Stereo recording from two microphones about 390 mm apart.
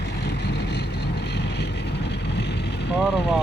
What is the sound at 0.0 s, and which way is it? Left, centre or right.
Vehicle, left.